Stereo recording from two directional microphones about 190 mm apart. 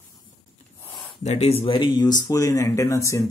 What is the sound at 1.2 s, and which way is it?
Speech, 35° left (ahead or behind).